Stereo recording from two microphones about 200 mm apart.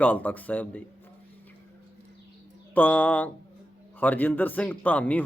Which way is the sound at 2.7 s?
10° left (ahead or behind).